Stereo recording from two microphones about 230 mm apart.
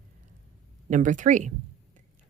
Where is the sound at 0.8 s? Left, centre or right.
Right.